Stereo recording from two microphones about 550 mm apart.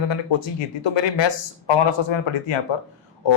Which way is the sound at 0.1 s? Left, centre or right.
Left.